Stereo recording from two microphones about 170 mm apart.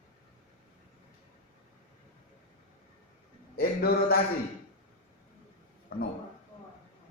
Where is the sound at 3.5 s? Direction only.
65° left (ahead or behind).